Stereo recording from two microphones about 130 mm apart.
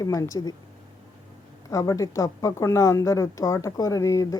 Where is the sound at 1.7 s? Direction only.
25° left (ahead or behind).